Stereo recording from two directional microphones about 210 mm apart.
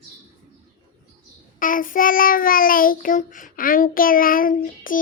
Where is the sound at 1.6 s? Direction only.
40° left (ahead or behind).